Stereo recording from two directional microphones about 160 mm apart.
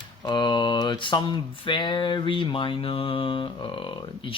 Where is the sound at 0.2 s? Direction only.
30° left (ahead or behind).